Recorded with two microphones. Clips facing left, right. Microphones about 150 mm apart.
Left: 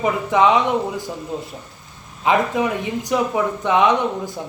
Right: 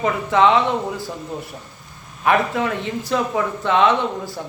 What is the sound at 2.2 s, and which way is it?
A man's voice, 15° left (ahead or behind).